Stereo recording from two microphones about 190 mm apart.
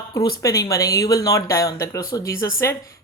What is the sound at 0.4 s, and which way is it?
Speech, 15° left (ahead or behind).